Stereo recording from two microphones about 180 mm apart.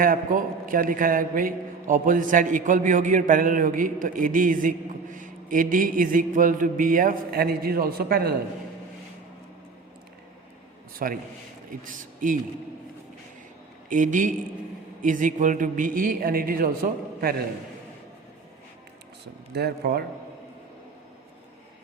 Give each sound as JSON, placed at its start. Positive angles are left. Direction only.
{"t": 0.0, "sound": "a man's voice", "side_deg": -50}
{"t": 11.0, "sound": "a man's voice", "side_deg": -50}
{"t": 13.9, "sound": "a man's voice", "side_deg": -45}
{"t": 19.2, "sound": "speech", "side_deg": -65}